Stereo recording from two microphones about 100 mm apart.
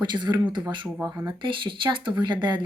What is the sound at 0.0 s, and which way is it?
Speech, 50° right (ahead or behind).